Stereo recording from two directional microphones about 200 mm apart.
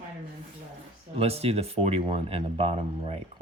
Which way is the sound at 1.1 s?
30° right (ahead or behind).